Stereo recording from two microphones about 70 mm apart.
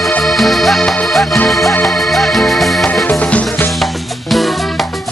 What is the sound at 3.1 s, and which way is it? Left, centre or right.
Music, centre.